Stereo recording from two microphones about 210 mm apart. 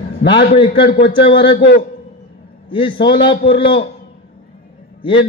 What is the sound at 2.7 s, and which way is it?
A man's voice, 25° left (ahead or behind).